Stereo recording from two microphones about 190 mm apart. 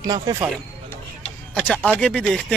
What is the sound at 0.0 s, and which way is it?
Speech, 20° right (ahead or behind).